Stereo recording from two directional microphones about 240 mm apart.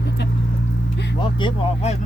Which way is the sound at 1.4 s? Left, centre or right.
Left.